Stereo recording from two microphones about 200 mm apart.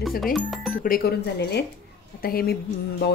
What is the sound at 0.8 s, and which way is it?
A woman's voice, 50° left (ahead or behind).